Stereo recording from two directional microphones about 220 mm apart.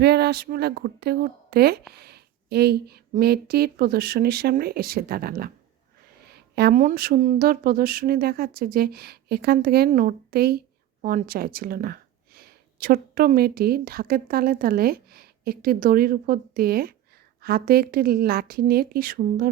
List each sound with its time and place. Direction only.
0.0 s speech: 50° right (ahead or behind)